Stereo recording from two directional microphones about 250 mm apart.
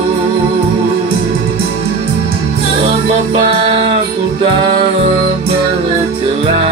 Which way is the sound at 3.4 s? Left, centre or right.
Right.